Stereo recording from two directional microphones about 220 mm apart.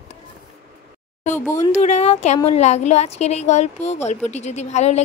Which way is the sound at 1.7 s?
30° left (ahead or behind).